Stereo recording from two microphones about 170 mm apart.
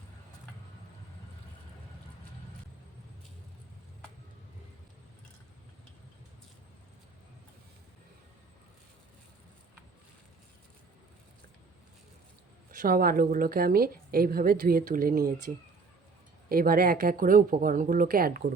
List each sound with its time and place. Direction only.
12.8 s a woman's voice: 55° right (ahead or behind)